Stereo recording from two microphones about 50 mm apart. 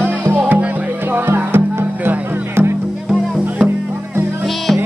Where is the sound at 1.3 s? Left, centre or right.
Right.